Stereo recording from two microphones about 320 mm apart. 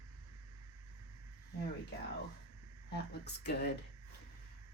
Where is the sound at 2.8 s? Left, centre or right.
Left.